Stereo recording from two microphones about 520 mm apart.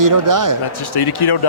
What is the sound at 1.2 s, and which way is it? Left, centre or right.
Speech, left.